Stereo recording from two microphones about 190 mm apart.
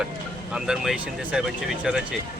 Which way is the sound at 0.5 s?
5° right (ahead or behind).